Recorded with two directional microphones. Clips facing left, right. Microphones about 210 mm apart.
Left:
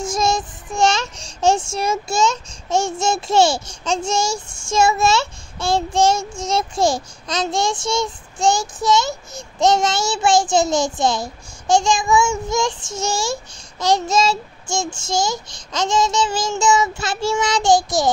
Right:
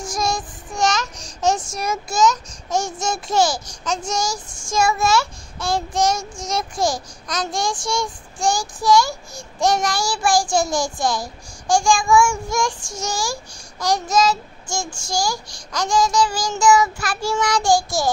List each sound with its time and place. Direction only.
0.0 s child singing: 25° left (ahead or behind)